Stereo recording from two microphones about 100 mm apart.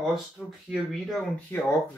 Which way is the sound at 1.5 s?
20° left (ahead or behind).